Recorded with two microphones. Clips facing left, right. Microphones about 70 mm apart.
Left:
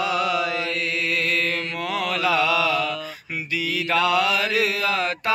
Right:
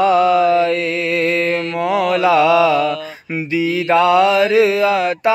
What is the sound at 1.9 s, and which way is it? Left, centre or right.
Mantra, right.